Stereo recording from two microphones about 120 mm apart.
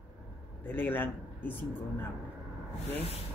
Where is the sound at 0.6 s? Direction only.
15° left (ahead or behind).